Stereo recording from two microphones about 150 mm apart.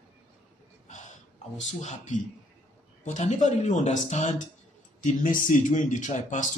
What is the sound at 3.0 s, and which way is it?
Speech, 50° left (ahead or behind).